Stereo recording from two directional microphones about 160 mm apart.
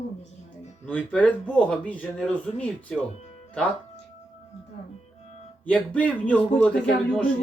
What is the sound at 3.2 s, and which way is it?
Music, 40° left (ahead or behind).